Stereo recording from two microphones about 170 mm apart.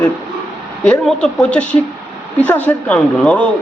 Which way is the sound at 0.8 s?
5° left (ahead or behind).